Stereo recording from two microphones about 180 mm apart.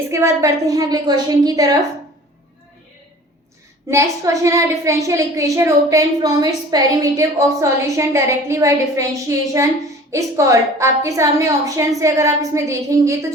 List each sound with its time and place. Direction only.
0.1 s a woman's voice: 15° right (ahead or behind)
3.8 s a woman's voice: 15° right (ahead or behind)